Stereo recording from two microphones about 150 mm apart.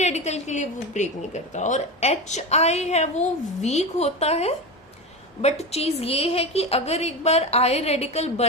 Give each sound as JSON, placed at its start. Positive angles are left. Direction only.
{"t": 0.0, "sound": "speech", "side_deg": 50}